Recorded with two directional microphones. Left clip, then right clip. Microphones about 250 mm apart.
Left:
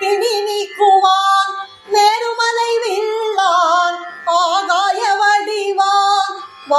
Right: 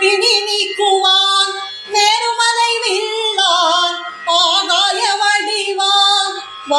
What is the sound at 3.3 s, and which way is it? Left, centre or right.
Music, centre.